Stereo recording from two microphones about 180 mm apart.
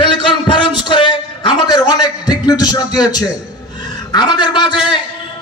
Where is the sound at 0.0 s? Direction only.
25° left (ahead or behind).